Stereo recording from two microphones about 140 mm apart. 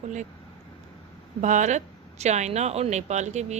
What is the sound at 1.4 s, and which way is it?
Speech, 60° right (ahead or behind).